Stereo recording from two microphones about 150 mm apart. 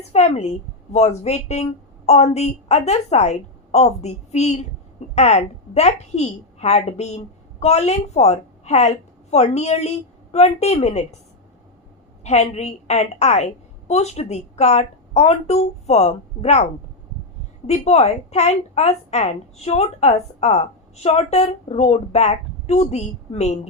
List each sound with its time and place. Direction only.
0.1 s a woman's voice: 45° left (ahead or behind)
12.2 s a woman's voice: 45° left (ahead or behind)
17.7 s a woman's voice: 45° left (ahead or behind)